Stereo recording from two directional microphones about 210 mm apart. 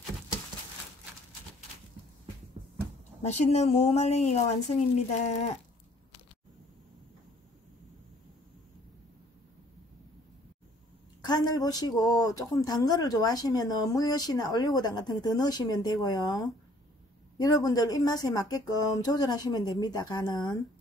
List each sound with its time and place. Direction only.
3.2 s speech: 30° left (ahead or behind)
11.2 s speech: 20° left (ahead or behind)
17.4 s speech: 15° left (ahead or behind)